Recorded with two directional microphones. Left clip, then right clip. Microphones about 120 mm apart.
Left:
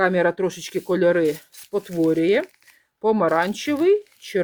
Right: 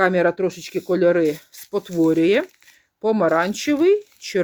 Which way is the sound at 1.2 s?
10° right (ahead or behind).